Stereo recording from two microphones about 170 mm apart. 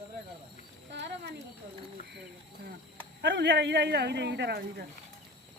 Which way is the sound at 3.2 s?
90° right.